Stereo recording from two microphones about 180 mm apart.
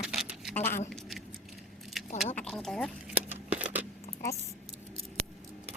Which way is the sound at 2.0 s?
Centre (ahead or behind).